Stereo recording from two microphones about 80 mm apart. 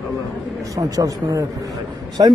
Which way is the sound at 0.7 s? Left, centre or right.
Right.